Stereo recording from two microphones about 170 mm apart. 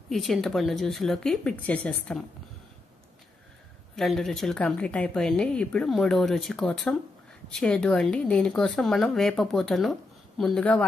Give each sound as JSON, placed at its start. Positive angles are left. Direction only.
{"t": 0.1, "sound": "speech", "side_deg": 0}
{"t": 3.9, "sound": "speech", "side_deg": 0}